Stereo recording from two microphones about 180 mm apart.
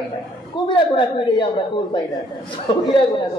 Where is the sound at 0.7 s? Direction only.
25° left (ahead or behind).